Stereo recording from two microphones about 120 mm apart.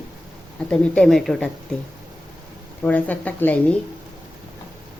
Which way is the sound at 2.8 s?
15° left (ahead or behind).